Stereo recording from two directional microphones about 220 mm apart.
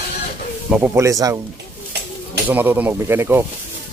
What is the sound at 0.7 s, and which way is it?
Speech, 5° right (ahead or behind).